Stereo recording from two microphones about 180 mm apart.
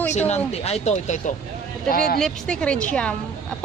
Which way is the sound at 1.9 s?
55° left (ahead or behind).